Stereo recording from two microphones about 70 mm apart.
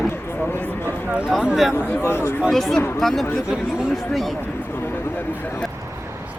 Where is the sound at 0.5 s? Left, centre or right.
Left.